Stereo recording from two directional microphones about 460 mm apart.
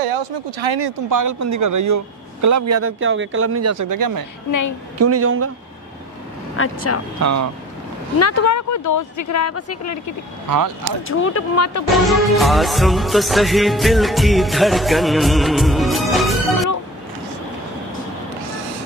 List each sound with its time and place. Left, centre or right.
0.1 s speech: right
1.1 s speech: right
4.5 s speech: left
4.9 s a woman's voice: right
6.5 s speech: left
7.2 s speech: right
8.2 s speech: left
10.5 s speech: right
11.1 s speech: left
11.9 s music: centre